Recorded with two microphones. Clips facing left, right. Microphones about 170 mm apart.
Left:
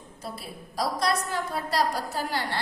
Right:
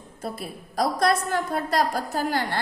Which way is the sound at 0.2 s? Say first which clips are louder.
Right 5 dB; 50° right (ahead or behind).